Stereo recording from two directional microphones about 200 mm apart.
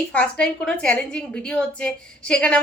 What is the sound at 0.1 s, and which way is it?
A woman's voice, 5° left (ahead or behind).